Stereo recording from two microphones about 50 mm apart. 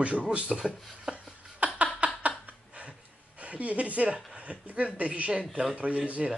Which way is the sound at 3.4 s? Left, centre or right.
Right.